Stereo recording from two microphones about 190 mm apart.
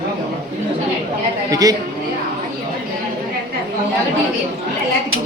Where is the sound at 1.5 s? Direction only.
20° right (ahead or behind).